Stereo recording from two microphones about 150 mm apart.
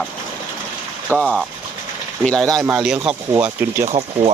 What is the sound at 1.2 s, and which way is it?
Speech, 5° left (ahead or behind).